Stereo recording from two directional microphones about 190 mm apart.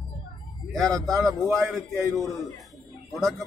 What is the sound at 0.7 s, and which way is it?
Speech, centre (ahead or behind).